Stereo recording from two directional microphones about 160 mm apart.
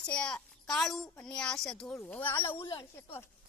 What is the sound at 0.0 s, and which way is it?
A child's voice, 5° left (ahead or behind).